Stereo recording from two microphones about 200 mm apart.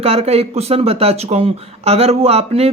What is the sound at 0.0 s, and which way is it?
Speech, 30° right (ahead or behind).